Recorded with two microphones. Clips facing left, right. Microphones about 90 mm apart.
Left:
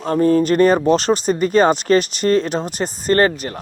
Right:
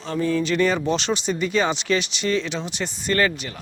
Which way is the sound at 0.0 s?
45° left (ahead or behind).